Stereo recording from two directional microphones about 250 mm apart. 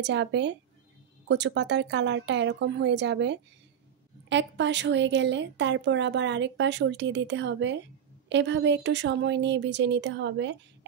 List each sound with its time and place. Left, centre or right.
0.0 s a woman's voice: right